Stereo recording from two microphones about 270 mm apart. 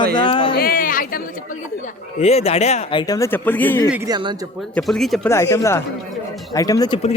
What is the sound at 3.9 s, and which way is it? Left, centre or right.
Speech, centre.